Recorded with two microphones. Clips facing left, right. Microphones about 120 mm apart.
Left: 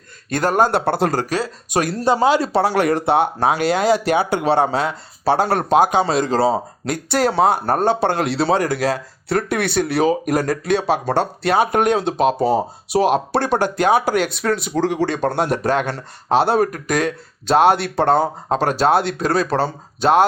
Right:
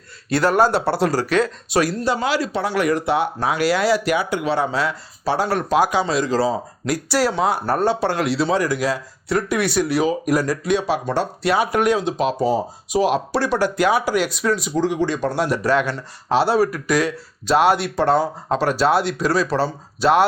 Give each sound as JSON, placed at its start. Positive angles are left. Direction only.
{"t": 0.3, "sound": "speech", "side_deg": 45}
{"t": 1.3, "sound": "speech", "side_deg": 45}
{"t": 2.1, "sound": "speech", "side_deg": 30}
{"t": 5.3, "sound": "speech", "side_deg": 55}
{"t": 6.4, "sound": "speech", "side_deg": 30}
{"t": 7.1, "sound": "speech", "side_deg": 55}